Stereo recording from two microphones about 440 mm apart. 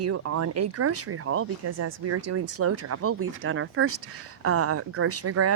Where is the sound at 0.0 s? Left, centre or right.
Right.